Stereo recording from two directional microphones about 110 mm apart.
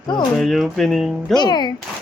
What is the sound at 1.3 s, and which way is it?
Speech, 40° left (ahead or behind).